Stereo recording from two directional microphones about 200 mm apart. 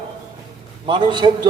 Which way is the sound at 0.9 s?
25° right (ahead or behind).